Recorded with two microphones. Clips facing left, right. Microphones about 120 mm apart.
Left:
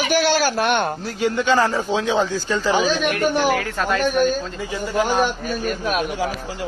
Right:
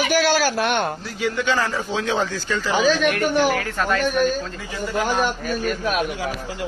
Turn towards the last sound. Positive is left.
turn(degrees=40)  # may be behind; listen again after turning